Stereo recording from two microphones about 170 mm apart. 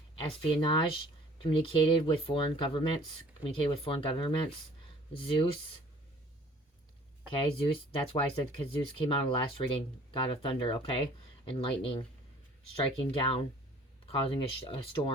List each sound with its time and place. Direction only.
0.2 s speech: 30° left (ahead or behind)
7.6 s speech: 30° left (ahead or behind)